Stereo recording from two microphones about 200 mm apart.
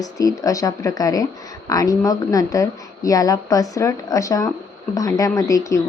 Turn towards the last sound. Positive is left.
turn(degrees=15)  # may be behind; listen again after turning